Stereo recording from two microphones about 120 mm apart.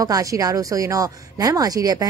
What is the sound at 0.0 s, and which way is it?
A woman's voice, 30° right (ahead or behind).